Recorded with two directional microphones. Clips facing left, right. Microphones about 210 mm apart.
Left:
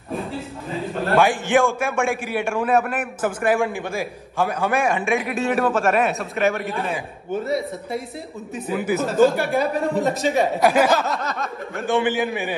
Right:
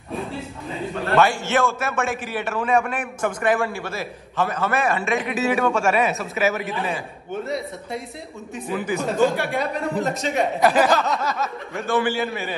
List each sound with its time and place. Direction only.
1.1 s a man's voice: 15° left (ahead or behind)
5.1 s speech: centre (ahead or behind)
11.9 s a man's voice: 20° left (ahead or behind)